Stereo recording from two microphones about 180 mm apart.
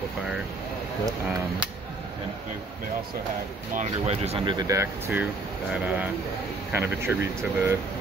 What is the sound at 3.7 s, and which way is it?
Speech, 35° right (ahead or behind).